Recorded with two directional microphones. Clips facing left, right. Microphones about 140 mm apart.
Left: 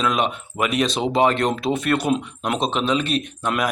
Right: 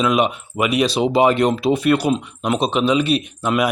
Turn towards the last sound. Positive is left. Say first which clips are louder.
# right 4 dB
turn(degrees=-5)  # may be behind; listen again after turning